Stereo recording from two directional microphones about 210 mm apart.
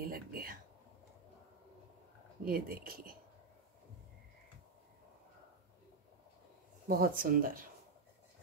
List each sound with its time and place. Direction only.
0.0 s a sound: 45° right (ahead or behind)
2.4 s speech: 45° right (ahead or behind)
6.9 s speech: 45° right (ahead or behind)